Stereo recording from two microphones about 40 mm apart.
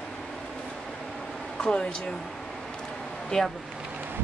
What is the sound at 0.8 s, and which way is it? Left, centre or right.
Vehicle, centre.